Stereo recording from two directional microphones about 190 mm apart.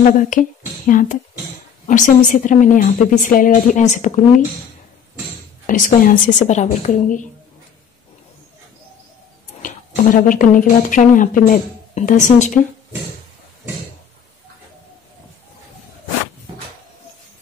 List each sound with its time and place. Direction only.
0.0 s a woman's voice: 45° left (ahead or behind)
5.7 s a woman's voice: 45° left (ahead or behind)
9.6 s speech: 45° left (ahead or behind)